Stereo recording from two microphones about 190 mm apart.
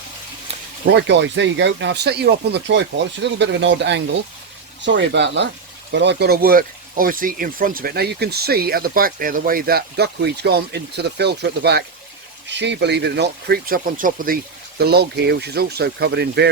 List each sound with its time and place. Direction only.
0.9 s speech: 65° right (ahead or behind); by 14.3 s 45° right (ahead or behind)
14.8 s speech: 60° right (ahead or behind)